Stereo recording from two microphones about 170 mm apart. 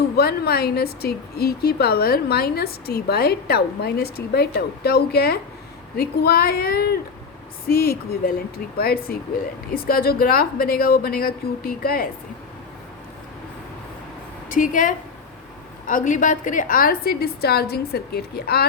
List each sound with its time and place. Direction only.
0.2 s a woman's voice: 65° left (ahead or behind)
14.5 s a woman's voice: 50° left (ahead or behind); by 18.6 s 65° left (ahead or behind)